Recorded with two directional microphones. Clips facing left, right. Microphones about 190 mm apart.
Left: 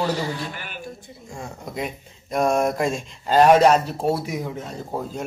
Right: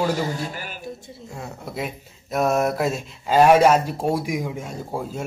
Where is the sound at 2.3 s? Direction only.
5° right (ahead or behind).